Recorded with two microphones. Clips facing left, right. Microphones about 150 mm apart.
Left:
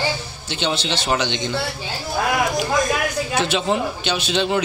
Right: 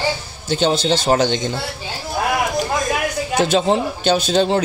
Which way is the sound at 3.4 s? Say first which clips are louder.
Right 5 dB; 45° right (ahead or behind).